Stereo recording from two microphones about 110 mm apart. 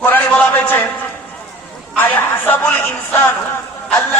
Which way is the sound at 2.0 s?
20° left (ahead or behind).